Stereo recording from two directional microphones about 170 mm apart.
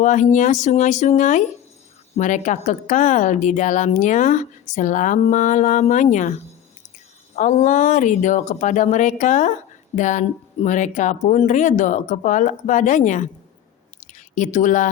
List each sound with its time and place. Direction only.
0.0 s speech: 45° left (ahead or behind)
7.3 s speech: 45° left (ahead or behind)
14.0 s a sound: 50° left (ahead or behind)